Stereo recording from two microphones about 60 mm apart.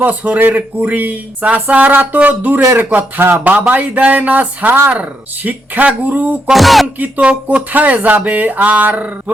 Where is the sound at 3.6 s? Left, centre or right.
Right.